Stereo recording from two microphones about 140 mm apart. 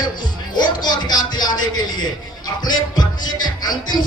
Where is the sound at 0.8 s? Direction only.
30° left (ahead or behind).